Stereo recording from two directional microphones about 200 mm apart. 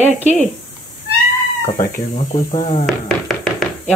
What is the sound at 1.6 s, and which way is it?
Speech, 40° left (ahead or behind).